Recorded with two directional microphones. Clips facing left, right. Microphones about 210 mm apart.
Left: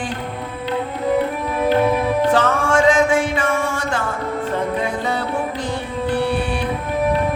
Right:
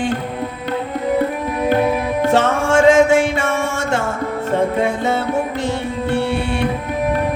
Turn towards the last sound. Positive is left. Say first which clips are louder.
# right 1 dB
turn(degrees=-25)  # may be behind; listen again after turning